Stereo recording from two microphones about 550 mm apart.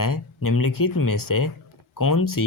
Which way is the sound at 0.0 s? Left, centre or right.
Left.